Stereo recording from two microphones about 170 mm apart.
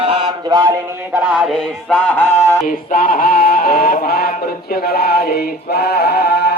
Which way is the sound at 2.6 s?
55° left (ahead or behind).